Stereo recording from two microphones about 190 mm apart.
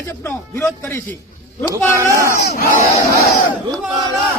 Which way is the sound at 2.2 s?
60° left (ahead or behind).